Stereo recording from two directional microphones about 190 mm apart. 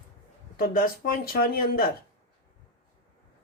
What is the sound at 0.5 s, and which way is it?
Speech, 50° left (ahead or behind).